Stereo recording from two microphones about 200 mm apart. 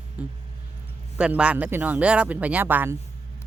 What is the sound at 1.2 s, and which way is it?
Speech, 5° right (ahead or behind).